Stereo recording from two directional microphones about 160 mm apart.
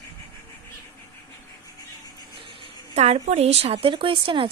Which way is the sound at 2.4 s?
35° right (ahead or behind).